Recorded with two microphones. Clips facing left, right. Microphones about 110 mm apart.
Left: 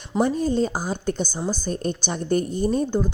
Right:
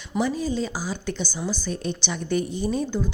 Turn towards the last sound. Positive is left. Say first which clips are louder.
# left 4 dB
turn(degrees=45)  # may be behind; listen again after turning